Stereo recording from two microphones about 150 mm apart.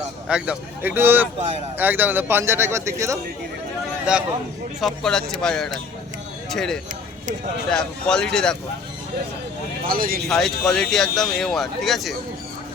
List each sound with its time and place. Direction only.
0.3 s speech: 5° right (ahead or behind)
4.1 s speech: 5° right (ahead or behind)
9.8 s speech: 75° right (ahead or behind)
10.2 s speech: centre (ahead or behind)